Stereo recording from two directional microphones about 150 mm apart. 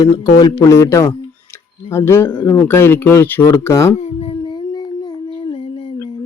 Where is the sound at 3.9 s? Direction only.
40° left (ahead or behind).